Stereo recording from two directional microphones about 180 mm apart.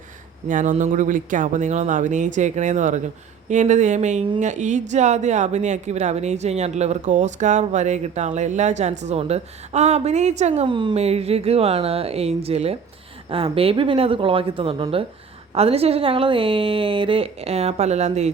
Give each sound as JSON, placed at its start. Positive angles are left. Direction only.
{"t": 0.4, "sound": "speech", "side_deg": -45}